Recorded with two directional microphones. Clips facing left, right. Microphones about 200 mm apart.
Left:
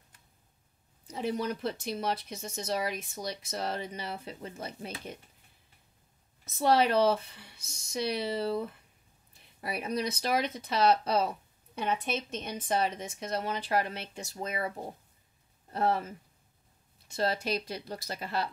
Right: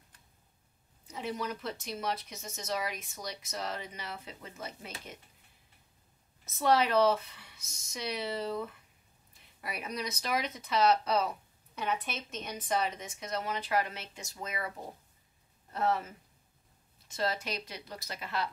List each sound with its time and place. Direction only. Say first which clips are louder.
1.0 s speech: left 5 dB; 35° left (ahead or behind)
6.6 s a woman's voice: left 1 dB; 30° left (ahead or behind)
15.7 s speech: left 2 dB; 30° left (ahead or behind)
17.1 s speech: left 4 dB; 30° left (ahead or behind)